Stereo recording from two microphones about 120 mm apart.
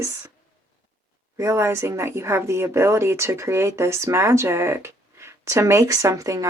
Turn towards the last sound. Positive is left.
turn(degrees=-25)  # may be behind; listen again after turning